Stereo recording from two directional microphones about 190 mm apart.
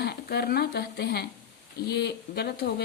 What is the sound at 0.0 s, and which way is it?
Speech, 60° left (ahead or behind).